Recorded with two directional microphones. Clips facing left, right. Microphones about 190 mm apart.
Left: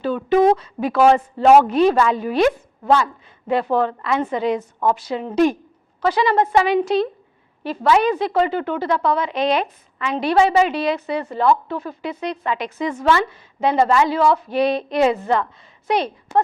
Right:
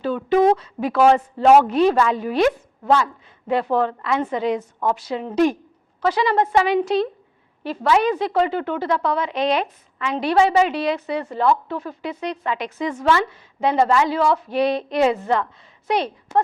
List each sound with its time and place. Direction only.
0.0 s a woman's voice: 10° left (ahead or behind)